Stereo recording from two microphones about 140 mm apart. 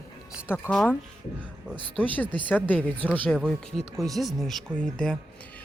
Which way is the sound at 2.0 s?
10° left (ahead or behind).